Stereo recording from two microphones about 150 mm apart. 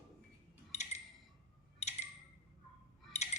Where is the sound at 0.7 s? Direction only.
50° left (ahead or behind).